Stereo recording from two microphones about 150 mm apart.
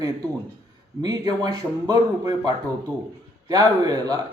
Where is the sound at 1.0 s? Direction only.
25° right (ahead or behind).